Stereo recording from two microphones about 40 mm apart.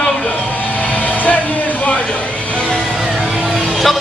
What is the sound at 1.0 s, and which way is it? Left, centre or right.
Music, left.